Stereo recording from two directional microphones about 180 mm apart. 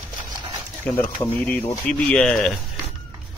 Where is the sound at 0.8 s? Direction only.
10° left (ahead or behind).